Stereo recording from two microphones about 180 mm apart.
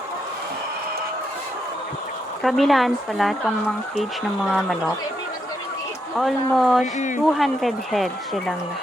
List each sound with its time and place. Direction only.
2.4 s speech: centre (ahead or behind)
6.1 s speech: centre (ahead or behind)
6.9 s speech: 45° left (ahead or behind)
7.3 s speech: centre (ahead or behind)